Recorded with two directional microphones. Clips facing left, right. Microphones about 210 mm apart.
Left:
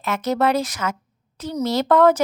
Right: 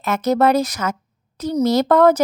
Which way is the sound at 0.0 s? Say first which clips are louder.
Right 4 dB; 40° right (ahead or behind).